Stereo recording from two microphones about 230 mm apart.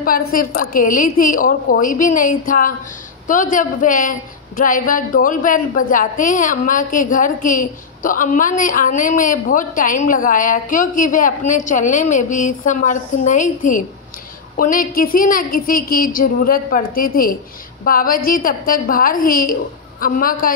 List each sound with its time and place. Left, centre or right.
0.3 s a woman's voice: left
14.6 s a woman's voice: left